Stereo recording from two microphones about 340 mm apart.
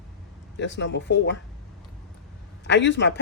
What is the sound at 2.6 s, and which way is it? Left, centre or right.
Speech, left.